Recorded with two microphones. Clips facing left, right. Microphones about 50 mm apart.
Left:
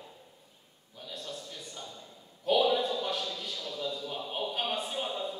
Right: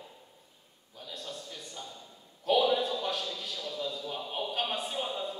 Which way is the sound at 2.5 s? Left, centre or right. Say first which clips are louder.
Even; centre.